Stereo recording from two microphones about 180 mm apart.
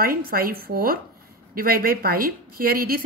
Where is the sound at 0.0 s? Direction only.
55° right (ahead or behind).